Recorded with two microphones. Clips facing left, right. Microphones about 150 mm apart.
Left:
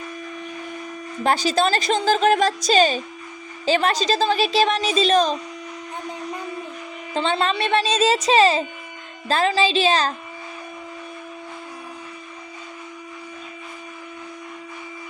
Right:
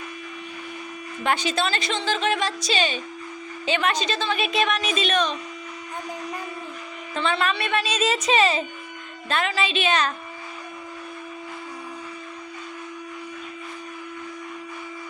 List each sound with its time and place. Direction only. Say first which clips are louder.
1.2 s a woman's voice: left 5 dB; 35° left (ahead or behind)
7.1 s a woman's voice: left 3 dB; 30° left (ahead or behind)